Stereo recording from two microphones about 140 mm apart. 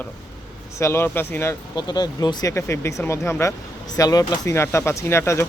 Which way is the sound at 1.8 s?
30° left (ahead or behind).